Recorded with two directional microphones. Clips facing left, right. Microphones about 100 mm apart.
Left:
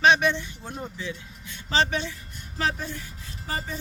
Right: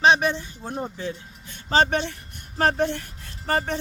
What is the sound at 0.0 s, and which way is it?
Speech, 35° right (ahead or behind).